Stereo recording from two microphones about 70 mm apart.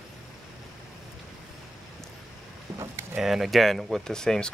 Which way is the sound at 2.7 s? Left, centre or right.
Right.